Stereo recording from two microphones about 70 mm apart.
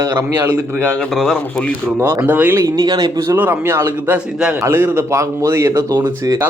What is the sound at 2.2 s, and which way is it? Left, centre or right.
Speech, right.